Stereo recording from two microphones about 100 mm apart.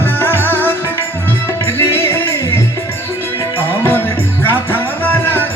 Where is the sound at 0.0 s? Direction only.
20° left (ahead or behind).